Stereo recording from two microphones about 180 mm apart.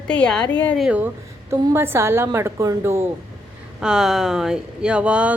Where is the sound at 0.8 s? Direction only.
5° right (ahead or behind).